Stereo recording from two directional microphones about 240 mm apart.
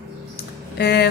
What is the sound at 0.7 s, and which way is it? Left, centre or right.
Speech, left.